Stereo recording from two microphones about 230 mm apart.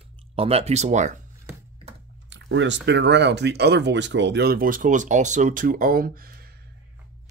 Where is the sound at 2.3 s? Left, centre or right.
Right.